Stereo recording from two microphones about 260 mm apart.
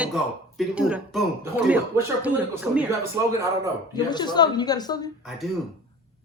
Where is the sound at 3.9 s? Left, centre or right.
Centre.